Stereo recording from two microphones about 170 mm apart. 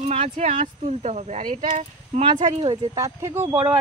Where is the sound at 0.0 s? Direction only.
40° right (ahead or behind).